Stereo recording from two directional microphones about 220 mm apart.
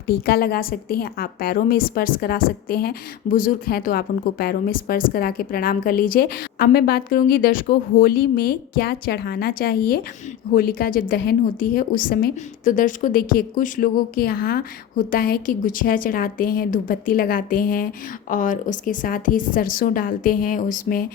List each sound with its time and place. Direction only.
0.3 s a woman's voice: 45° left (ahead or behind)